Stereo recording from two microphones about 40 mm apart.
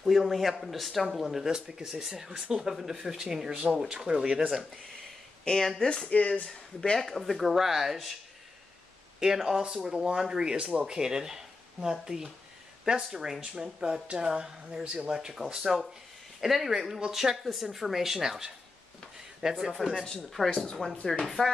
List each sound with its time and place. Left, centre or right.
0.0 s speech: centre
3.5 s speech: right
5.4 s speech: centre
6.0 s speech: left
6.4 s speech: centre
7.0 s speech: centre
7.3 s speech: centre
9.2 s speech: centre
13.8 s speech: right; by 19.6 s centre
19.8 s speech: centre
20.4 s speech: centre